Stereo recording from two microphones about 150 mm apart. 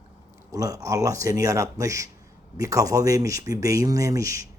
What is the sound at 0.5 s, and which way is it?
Speech, 25° right (ahead or behind).